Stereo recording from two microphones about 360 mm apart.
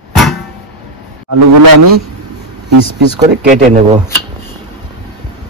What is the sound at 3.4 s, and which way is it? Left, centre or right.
Speech, centre.